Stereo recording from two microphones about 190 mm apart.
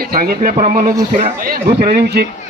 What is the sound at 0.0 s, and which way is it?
Speech, 50° right (ahead or behind).